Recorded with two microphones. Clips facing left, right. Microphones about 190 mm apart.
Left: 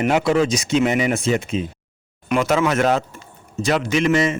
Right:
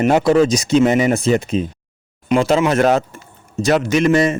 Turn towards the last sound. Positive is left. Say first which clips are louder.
# right 4 dB
turn(degrees=-40)  # may be behind; listen again after turning